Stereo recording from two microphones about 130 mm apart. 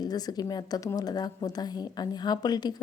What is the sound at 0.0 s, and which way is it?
A woman's voice, 30° left (ahead or behind).